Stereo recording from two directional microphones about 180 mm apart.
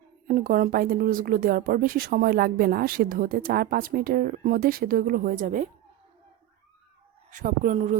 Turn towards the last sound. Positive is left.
turn(degrees=-40)  # may be behind; listen again after turning